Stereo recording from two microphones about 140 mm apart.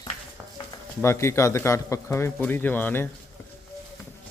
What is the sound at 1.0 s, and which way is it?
Speech, 20° left (ahead or behind).